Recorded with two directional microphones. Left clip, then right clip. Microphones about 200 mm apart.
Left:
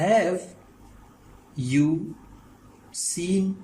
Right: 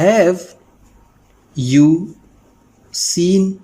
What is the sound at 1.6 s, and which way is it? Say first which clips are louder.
Speech: right 11 dB; 60° right (ahead or behind).